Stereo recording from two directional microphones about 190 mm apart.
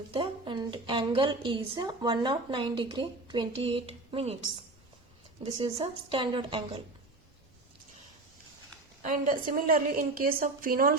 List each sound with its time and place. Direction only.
0.1 s a woman's voice: 30° right (ahead or behind)
5.4 s a woman's voice: 30° right (ahead or behind)
9.0 s a woman's voice: 45° right (ahead or behind)